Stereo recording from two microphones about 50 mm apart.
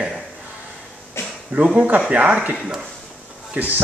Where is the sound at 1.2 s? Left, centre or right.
Left.